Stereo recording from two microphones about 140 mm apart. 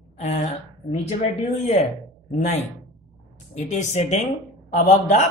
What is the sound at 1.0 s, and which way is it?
Speech, 50° left (ahead or behind).